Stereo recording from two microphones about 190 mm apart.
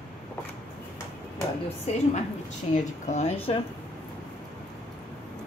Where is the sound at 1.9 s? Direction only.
35° left (ahead or behind).